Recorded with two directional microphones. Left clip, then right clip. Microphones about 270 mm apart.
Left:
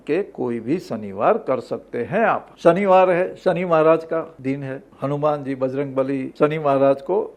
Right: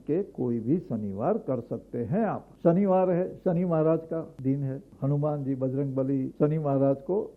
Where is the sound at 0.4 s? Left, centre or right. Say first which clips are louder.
Left 5 dB; centre.